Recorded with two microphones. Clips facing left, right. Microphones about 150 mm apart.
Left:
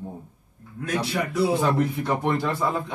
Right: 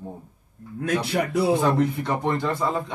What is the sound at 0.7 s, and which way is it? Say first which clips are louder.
Speech: right 3 dB; 60° right (ahead or behind).